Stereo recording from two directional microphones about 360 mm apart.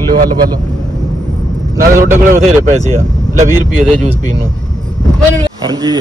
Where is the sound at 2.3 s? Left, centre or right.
Centre.